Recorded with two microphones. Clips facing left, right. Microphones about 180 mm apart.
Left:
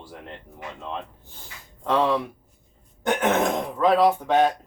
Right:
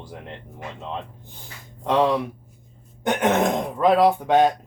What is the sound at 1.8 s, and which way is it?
Speech, 15° right (ahead or behind).